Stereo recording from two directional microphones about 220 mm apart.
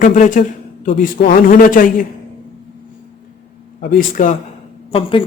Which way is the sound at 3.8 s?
40° left (ahead or behind).